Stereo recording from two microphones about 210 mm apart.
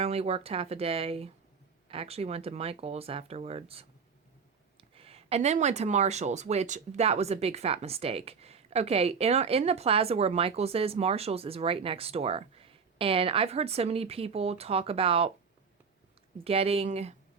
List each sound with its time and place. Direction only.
0.0 s speech: 30° right (ahead or behind)
16.4 s speech: 30° right (ahead or behind)